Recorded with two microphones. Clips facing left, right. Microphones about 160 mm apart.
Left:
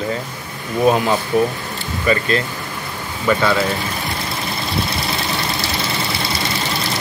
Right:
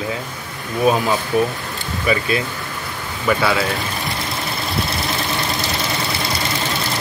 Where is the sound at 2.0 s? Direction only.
10° right (ahead or behind).